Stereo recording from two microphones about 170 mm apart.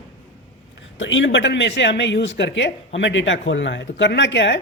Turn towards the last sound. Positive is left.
turn(degrees=90)